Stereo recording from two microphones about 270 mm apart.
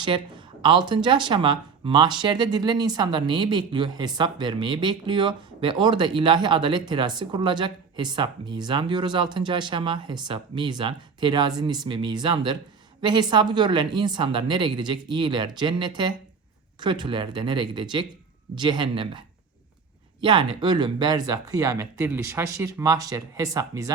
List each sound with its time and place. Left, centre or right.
0.0 s speech: centre
20.2 s speech: centre